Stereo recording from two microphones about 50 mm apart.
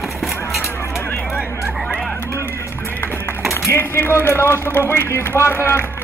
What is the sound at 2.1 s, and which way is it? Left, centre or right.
Vehicle, left.